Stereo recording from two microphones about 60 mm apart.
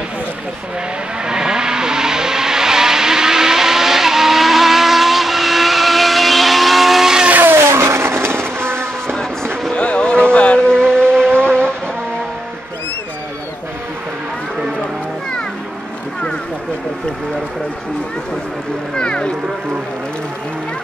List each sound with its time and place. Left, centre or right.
1.2 s vehicle: centre
7.2 s vehicle: right
7.7 s vehicle: right
9.0 s music: centre
9.8 s a sound: centre
10.8 s vehicle: centre
18.9 s boat: centre